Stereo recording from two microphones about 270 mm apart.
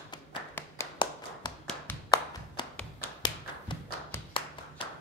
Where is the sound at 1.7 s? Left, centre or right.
Centre.